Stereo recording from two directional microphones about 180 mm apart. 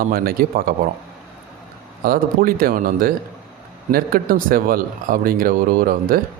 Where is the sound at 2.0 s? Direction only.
55° right (ahead or behind).